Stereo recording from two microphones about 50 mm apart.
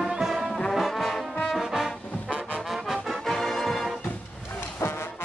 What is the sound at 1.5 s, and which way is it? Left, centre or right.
Trombone, centre.